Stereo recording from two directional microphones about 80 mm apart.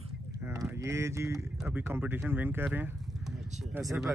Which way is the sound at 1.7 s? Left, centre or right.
Right.